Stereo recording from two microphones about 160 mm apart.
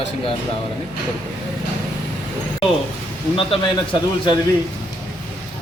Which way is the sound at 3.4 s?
35° left (ahead or behind).